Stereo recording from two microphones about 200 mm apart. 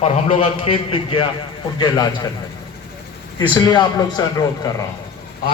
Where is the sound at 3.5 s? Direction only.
20° left (ahead or behind).